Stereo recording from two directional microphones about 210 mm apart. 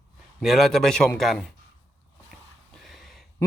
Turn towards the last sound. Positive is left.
turn(degrees=0)  # may be behind; listen again after turning